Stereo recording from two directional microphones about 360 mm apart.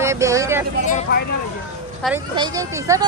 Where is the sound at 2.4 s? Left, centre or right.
Centre.